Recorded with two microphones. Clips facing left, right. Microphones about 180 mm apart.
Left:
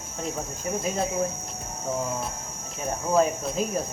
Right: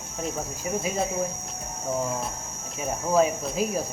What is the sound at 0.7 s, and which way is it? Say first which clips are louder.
Speech: even; 10° right (ahead or behind).